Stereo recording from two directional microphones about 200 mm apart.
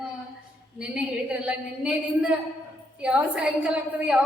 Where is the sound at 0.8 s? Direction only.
5° right (ahead or behind).